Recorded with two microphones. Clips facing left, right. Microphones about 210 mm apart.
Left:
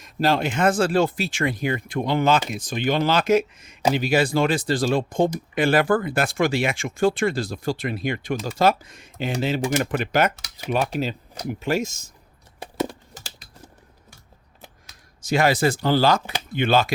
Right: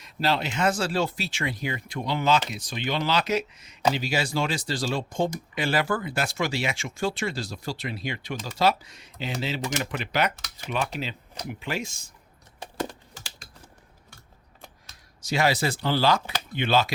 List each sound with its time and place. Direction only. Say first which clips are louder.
0.0 s speech: left 5 dB; 50° left (ahead or behind)
15.2 s speech: left 5 dB; 50° left (ahead or behind)